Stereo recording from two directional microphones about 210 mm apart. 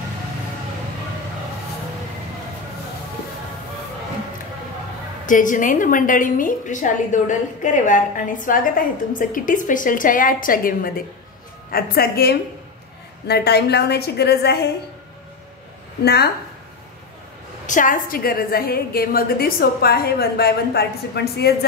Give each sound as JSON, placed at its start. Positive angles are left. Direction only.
{"t": 5.2, "sound": "a woman's voice", "side_deg": 40}
{"t": 16.0, "sound": "a woman's voice", "side_deg": 50}
{"t": 17.6, "sound": "a woman's voice", "side_deg": 40}